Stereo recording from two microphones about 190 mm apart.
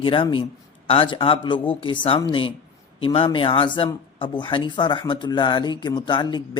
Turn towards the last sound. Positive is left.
turn(degrees=25)  # may be behind; listen again after turning